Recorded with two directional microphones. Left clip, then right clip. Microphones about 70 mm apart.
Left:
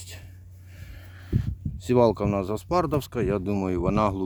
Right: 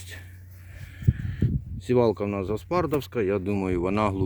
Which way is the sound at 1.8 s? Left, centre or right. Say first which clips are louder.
Left 2 dB; left.